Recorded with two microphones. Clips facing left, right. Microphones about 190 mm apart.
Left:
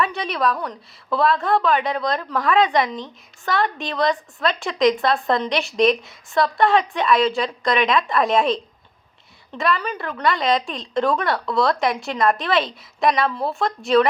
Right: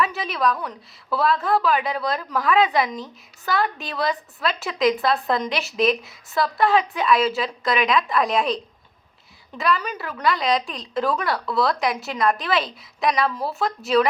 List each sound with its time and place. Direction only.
0.0 s a woman's voice: centre (ahead or behind)